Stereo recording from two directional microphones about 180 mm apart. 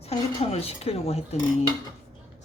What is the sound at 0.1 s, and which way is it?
Speech, 35° left (ahead or behind).